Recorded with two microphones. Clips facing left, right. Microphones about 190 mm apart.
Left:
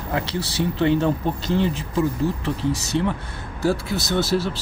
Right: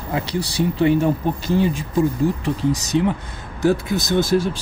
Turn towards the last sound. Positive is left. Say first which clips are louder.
# right 4 dB
turn(degrees=-15)  # may be behind; listen again after turning